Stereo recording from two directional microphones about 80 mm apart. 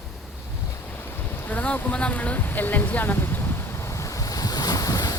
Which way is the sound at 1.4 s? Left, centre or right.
Centre.